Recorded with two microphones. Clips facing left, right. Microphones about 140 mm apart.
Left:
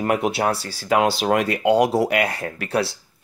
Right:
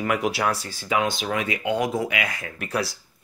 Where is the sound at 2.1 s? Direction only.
35° left (ahead or behind).